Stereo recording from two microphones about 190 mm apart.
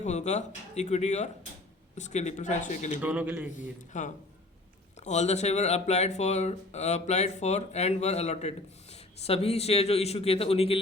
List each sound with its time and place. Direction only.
0.0 s speech: 35° left (ahead or behind)
3.0 s a man's voice: 5° right (ahead or behind)
3.6 s speech: 40° left (ahead or behind)